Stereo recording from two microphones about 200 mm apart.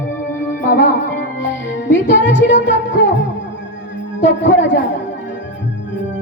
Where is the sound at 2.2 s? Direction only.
65° left (ahead or behind).